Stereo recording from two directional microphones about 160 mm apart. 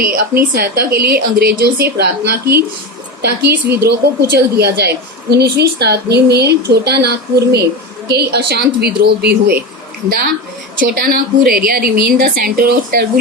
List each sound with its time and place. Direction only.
0.0 s a woman's voice: 65° right (ahead or behind); by 9.6 s 85° right
10.1 s a woman's voice: 70° right (ahead or behind)